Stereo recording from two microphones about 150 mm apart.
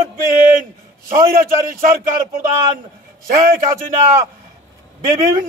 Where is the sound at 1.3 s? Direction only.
65° right (ahead or behind).